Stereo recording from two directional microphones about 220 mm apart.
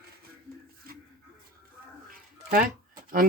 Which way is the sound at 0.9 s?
40° right (ahead or behind).